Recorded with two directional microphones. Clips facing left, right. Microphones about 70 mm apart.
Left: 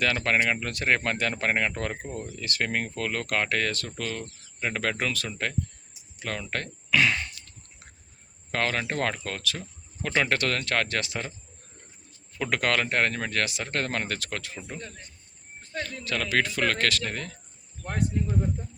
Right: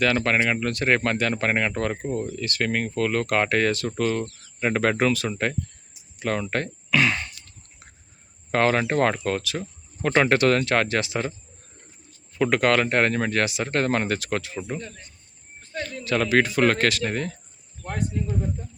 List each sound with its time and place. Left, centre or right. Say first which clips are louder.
0.0 s speech: right 3 dB; centre
6.9 s a sound: right 2 dB; centre
8.5 s speech: right 7 dB; right
9.6 s a sound: right 6 dB; right
10.2 s speech: right 8 dB; centre
12.3 s speech: right 6 dB; centre
16.0 s speech: right 6 dB; right